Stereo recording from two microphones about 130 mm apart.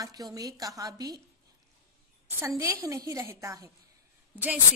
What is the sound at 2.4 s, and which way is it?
A woman's voice, 20° right (ahead or behind).